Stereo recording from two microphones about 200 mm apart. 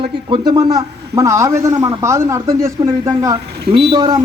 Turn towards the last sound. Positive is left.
turn(degrees=-20)  # may be behind; listen again after turning